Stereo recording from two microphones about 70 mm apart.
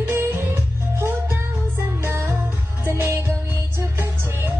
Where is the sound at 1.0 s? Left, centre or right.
Right.